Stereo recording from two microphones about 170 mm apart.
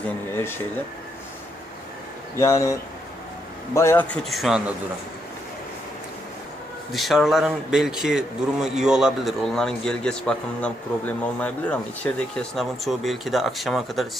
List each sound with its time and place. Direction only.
2.4 s speech: 20° left (ahead or behind)
3.8 s a man's voice: 15° left (ahead or behind)
6.9 s a man's voice: centre (ahead or behind)